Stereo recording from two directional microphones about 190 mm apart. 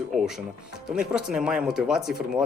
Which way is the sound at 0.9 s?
5° right (ahead or behind).